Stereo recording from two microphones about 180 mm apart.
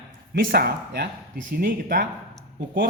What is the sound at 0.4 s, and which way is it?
Speech, 55° right (ahead or behind).